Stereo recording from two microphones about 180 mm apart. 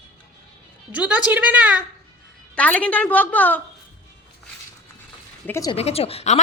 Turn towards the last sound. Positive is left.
turn(degrees=35)  # may be behind; listen again after turning